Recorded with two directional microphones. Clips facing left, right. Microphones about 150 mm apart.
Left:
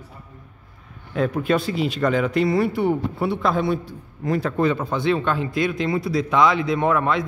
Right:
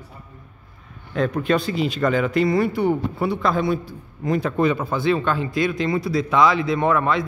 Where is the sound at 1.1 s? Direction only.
10° left (ahead or behind).